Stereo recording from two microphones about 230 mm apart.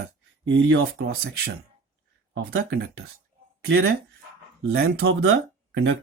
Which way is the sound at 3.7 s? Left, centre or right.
Right.